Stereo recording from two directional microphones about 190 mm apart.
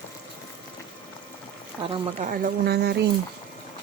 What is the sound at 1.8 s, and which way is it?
Speech, 25° right (ahead or behind).